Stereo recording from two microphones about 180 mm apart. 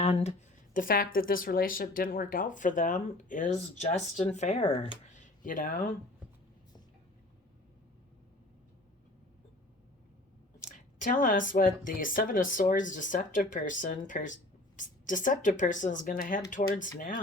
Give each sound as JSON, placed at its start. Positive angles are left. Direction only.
{"t": 0.0, "sound": "speech", "side_deg": 35}
{"t": 10.6, "sound": "speech", "side_deg": 50}